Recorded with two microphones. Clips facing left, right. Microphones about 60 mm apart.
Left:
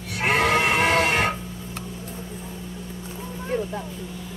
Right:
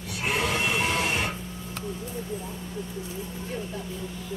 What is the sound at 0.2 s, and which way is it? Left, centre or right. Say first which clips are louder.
Sheep: left 7 dB; left.